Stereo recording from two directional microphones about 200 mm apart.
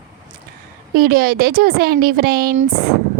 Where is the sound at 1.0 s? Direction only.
50° right (ahead or behind).